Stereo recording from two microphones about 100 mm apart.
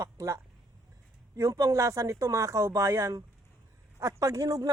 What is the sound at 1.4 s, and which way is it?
A man's voice, 35° right (ahead or behind).